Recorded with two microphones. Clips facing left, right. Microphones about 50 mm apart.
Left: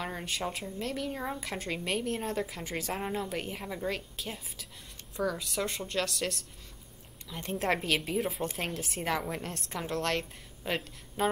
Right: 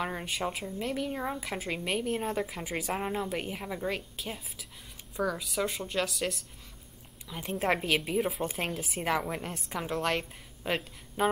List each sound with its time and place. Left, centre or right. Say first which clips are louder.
0.0 s a woman's voice: right 2 dB; centre